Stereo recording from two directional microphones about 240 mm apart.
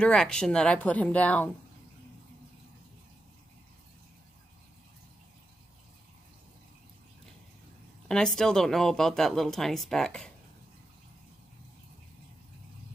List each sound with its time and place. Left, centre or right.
0.0 s speech: centre
8.1 s speech: centre